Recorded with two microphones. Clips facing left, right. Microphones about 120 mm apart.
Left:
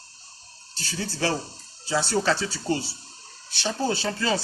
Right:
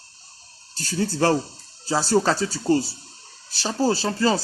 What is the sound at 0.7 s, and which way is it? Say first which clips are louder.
Speech: right 8 dB; 45° right (ahead or behind).